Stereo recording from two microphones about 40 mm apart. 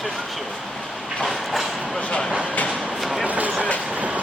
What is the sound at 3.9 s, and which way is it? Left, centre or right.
Train, right.